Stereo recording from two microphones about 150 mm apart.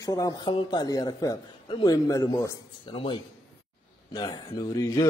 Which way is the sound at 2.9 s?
35° left (ahead or behind).